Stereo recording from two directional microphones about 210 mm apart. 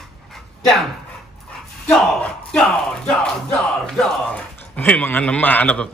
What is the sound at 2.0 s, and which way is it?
Speech, 5° left (ahead or behind).